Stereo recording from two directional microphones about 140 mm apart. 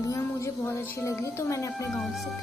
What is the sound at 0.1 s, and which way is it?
Speech, 20° left (ahead or behind).